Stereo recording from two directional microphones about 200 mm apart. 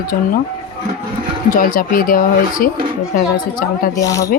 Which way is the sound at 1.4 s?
45° left (ahead or behind).